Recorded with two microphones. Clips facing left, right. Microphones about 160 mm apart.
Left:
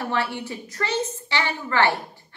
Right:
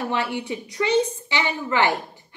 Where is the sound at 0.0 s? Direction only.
20° right (ahead or behind).